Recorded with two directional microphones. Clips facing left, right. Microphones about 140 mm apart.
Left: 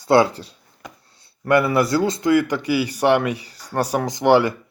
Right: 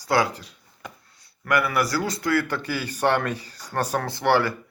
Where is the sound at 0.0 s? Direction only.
25° left (ahead or behind).